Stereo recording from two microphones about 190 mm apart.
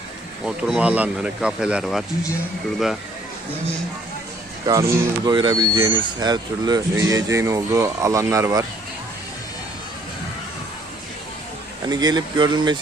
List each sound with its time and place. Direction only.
0.4 s speech: 5° right (ahead or behind)
4.6 s speech: 15° right (ahead or behind)
11.9 s speech: 20° right (ahead or behind)